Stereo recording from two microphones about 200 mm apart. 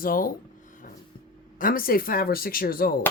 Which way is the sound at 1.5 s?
45° left (ahead or behind).